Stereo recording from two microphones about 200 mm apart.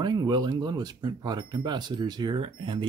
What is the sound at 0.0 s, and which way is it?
Speech, 20° right (ahead or behind).